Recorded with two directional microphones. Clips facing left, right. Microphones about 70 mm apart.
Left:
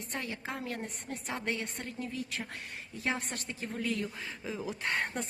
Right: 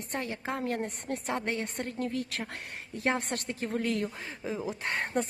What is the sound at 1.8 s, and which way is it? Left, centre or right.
Speech, right.